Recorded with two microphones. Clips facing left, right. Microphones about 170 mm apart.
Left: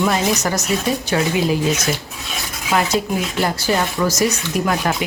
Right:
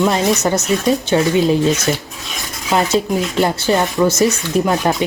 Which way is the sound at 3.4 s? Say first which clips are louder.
Right 4 dB; 25° right (ahead or behind).